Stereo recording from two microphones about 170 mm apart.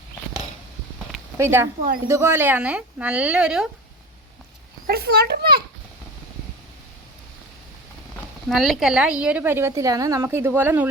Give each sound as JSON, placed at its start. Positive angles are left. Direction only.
{"t": 1.4, "sound": "a woman's voice", "side_deg": -15}
{"t": 4.9, "sound": "a child's voice", "side_deg": -70}
{"t": 8.4, "sound": "a woman's voice", "side_deg": 0}